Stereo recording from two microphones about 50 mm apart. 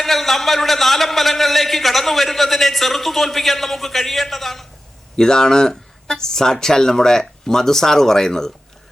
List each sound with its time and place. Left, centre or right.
0.0 s a man's voice: centre